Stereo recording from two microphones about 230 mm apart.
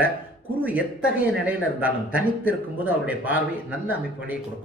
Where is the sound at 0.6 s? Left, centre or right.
Centre.